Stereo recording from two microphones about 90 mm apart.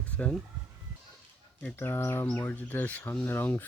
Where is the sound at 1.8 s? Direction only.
25° left (ahead or behind).